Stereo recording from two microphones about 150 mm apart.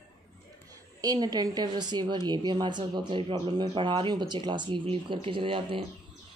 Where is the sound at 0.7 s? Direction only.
25° right (ahead or behind).